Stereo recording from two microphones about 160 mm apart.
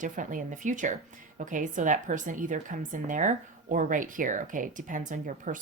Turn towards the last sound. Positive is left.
turn(degrees=-55)  # may be behind; listen again after turning